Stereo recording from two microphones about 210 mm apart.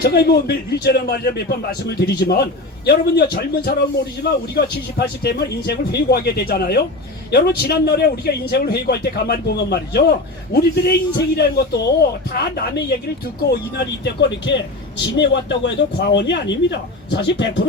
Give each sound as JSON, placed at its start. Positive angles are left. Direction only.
{"t": 0.0, "sound": "a man's voice", "side_deg": 50}
{"t": 13.5, "sound": "a man's voice", "side_deg": 50}